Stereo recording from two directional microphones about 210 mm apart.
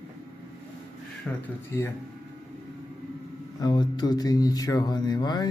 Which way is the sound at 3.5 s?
20° left (ahead or behind).